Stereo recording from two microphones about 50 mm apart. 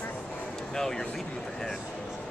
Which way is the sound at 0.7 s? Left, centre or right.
Centre.